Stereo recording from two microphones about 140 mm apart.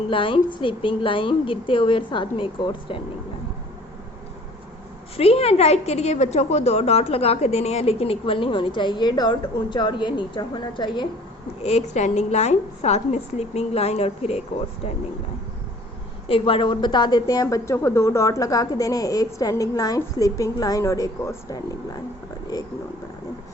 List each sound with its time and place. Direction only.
0.1 s a woman's voice: 40° left (ahead or behind)
5.1 s a woman's voice: 45° left (ahead or behind)
11.6 s a woman's voice: 50° left (ahead or behind)
16.3 s a woman's voice: 40° left (ahead or behind); by 21.6 s 25° left (ahead or behind)